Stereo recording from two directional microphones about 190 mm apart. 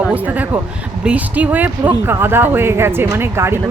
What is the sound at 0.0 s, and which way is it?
Speech, 5° right (ahead or behind).